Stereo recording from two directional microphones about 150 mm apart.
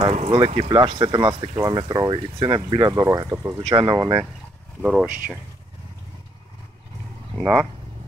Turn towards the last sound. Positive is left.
turn(degrees=-5)  # may be behind; listen again after turning